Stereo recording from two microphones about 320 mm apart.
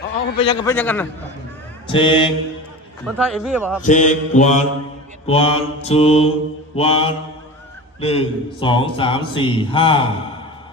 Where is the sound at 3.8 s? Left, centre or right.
Left.